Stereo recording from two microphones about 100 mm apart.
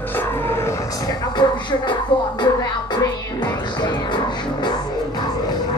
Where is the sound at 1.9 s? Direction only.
50° left (ahead or behind).